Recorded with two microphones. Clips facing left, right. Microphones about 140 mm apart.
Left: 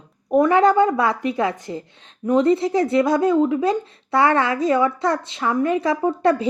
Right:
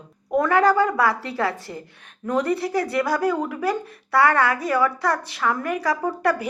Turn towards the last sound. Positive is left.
turn(degrees=25)  # may be behind; listen again after turning